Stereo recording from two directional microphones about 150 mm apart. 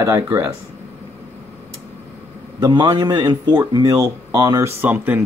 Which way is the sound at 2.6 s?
25° right (ahead or behind).